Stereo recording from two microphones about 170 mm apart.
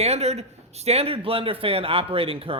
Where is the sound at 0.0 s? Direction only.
40° right (ahead or behind).